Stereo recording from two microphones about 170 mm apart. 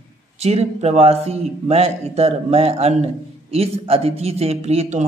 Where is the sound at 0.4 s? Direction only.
40° right (ahead or behind).